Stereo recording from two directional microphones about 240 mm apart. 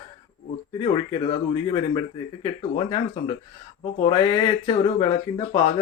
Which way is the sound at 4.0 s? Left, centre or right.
Left.